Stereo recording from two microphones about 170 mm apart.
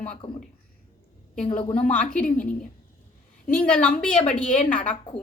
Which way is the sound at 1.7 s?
5° left (ahead or behind).